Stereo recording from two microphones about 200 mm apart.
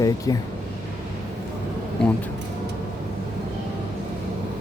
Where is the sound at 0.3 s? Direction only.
20° left (ahead or behind).